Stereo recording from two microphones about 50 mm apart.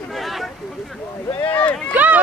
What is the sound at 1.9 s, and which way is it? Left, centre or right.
Run, right.